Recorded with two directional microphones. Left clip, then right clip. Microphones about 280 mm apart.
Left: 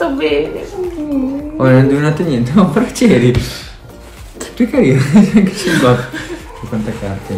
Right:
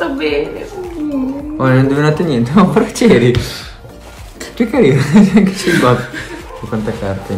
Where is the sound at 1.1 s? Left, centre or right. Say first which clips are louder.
Left 2 dB; centre.